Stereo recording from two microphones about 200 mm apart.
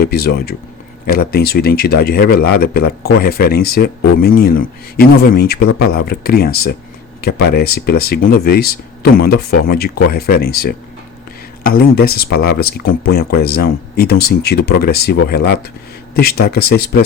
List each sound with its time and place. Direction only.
0.0 s speech: 50° left (ahead or behind)